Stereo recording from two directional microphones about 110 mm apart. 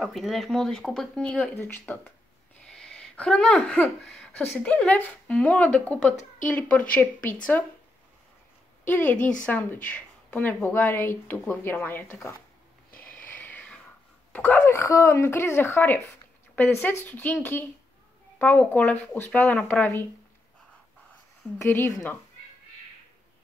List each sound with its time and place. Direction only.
0.0 s speech: centre (ahead or behind)
1.5 s speech: 20° left (ahead or behind)
2.6 s a sound: 5° left (ahead or behind)
4.0 s speech: 10° left (ahead or behind)
8.8 s speech: 15° left (ahead or behind)
12.9 s a sound: 15° left (ahead or behind)
14.3 s a woman's voice: 15° left (ahead or behind)
21.5 s a woman's voice: 20° left (ahead or behind)